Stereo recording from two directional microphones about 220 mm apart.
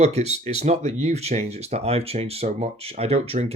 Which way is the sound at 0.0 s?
30° right (ahead or behind).